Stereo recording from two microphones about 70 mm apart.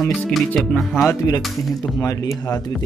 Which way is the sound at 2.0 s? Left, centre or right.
Left.